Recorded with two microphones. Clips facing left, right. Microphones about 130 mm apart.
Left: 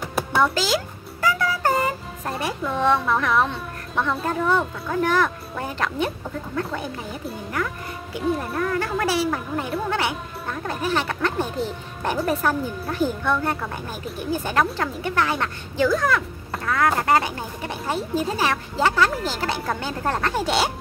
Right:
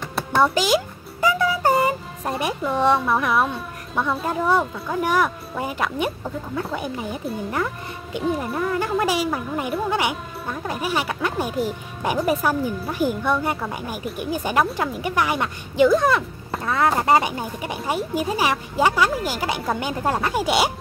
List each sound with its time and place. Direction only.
0.0 s a sound: 5° left (ahead or behind)
0.4 s music: 15° right (ahead or behind)
2.6 s speech: 10° right (ahead or behind)
7.5 s speech: 25° right (ahead or behind)
8.4 s speech: 10° right (ahead or behind)